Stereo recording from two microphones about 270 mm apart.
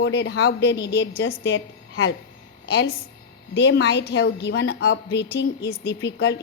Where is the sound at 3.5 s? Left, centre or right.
Left.